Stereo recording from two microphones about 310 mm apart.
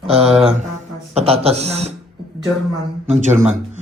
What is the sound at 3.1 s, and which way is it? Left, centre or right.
Speech, right.